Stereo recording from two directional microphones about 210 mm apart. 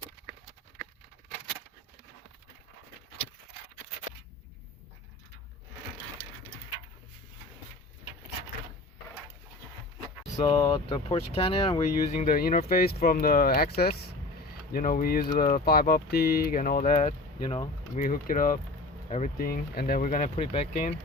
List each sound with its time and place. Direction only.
10.6 s speech: 25° left (ahead or behind)
17.9 s speech: 40° left (ahead or behind)